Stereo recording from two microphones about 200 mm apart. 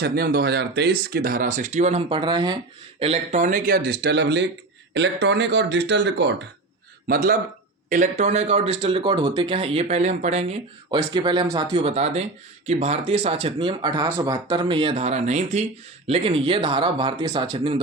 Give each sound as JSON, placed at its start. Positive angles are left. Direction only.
{"t": 0.0, "sound": "speech", "side_deg": -50}
{"t": 3.0, "sound": "speech", "side_deg": -35}
{"t": 7.1, "sound": "speech", "side_deg": -45}